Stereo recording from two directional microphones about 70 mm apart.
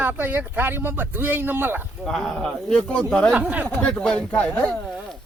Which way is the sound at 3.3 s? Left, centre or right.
Centre.